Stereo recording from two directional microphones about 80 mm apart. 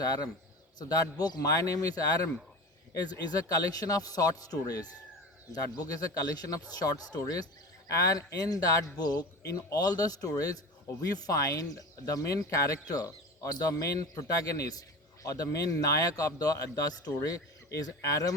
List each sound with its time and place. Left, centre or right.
0.0 s speech: left